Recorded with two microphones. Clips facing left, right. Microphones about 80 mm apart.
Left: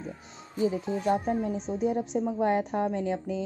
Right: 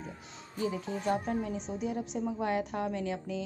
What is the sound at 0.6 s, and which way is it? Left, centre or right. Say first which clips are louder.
Speech: left 6 dB; left.